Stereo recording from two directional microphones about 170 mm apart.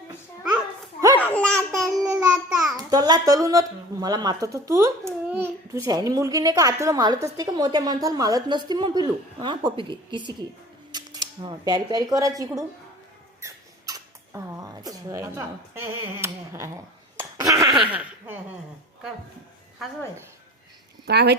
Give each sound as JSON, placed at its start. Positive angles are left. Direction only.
{"t": 1.1, "sound": "babbling", "side_deg": 10}
{"t": 2.7, "sound": "speech", "side_deg": -25}
{"t": 10.9, "sound": "cutlery", "side_deg": -25}
{"t": 13.4, "sound": "rodents", "side_deg": -20}
{"t": 21.1, "sound": "speech", "side_deg": -75}